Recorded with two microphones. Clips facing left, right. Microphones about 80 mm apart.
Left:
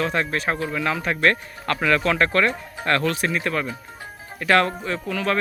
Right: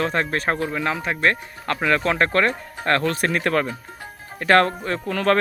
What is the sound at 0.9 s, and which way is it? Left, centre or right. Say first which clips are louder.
Speech: left 1 dB; centre.